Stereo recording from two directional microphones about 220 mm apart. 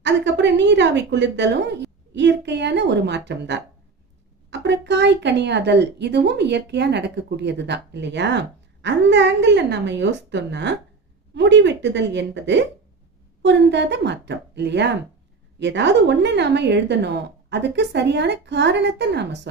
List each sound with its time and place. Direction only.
0.0 s speech: 55° right (ahead or behind)
4.6 s speech: 50° right (ahead or behind)